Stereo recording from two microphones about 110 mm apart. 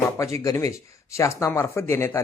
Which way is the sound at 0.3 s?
25° left (ahead or behind).